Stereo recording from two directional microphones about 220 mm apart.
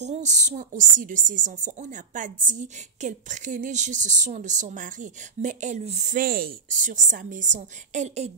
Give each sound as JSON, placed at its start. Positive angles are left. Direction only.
{"t": 0.0, "sound": "speech", "side_deg": -30}